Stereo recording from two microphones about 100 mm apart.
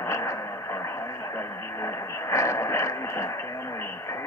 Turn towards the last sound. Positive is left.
turn(degrees=30)  # may be behind; listen again after turning